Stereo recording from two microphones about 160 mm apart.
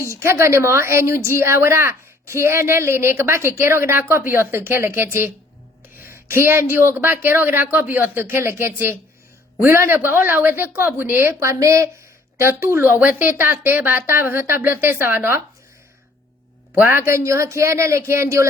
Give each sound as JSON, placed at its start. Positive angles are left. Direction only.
{"t": 0.1, "sound": "a woman's voice", "side_deg": -15}
{"t": 16.8, "sound": "a woman's voice", "side_deg": -15}